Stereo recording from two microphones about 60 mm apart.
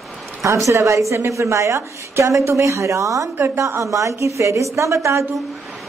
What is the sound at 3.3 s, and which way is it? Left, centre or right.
A woman's voice, right.